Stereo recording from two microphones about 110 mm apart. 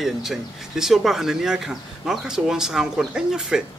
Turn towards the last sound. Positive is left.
turn(degrees=-5)  # may be behind; listen again after turning